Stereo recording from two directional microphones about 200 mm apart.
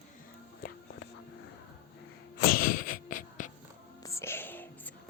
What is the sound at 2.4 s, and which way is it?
Sneeze, 50° left (ahead or behind).